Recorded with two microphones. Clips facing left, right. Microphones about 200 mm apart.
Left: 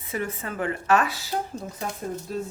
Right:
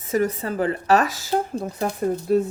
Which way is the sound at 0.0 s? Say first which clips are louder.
Right 8 dB; 40° right (ahead or behind).